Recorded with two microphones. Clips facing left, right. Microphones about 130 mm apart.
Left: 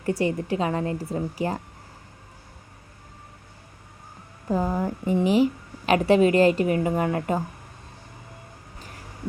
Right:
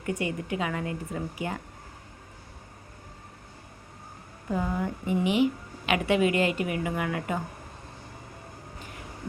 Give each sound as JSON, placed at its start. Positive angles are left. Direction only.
{"t": 0.0, "sound": "a woman's voice", "side_deg": 35}
{"t": 4.5, "sound": "a woman's voice", "side_deg": 35}